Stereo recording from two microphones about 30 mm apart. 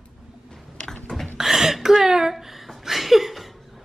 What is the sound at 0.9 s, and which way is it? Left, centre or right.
Burping, centre.